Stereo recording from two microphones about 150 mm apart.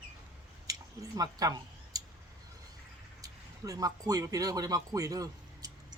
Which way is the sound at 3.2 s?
25° right (ahead or behind).